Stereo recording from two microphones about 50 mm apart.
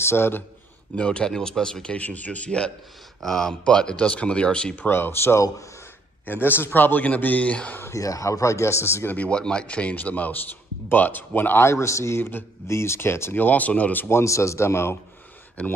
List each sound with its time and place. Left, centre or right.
0.0 s speech: left
0.9 s speech: left
3.2 s speech: centre
4.8 s a man's voice: left
7.9 s speech: left
9.2 s a man's voice: centre; by 11.6 s left
11.6 s speech: left
12.2 s speech: left
12.6 s speech: left
13.3 s a man's voice: left
14.0 s speech: left